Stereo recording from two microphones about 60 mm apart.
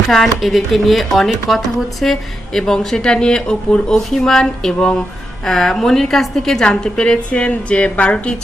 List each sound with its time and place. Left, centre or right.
0.1 s a woman's voice: centre